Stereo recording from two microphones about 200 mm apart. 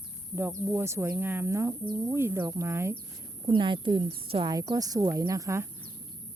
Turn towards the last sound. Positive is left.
turn(degrees=-15)  # may be behind; listen again after turning